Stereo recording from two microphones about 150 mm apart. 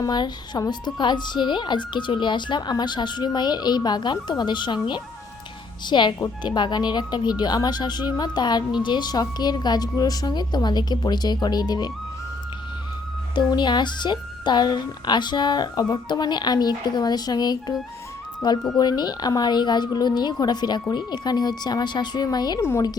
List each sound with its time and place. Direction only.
0.0 s speech: 30° left (ahead or behind)
13.3 s speech: 30° left (ahead or behind)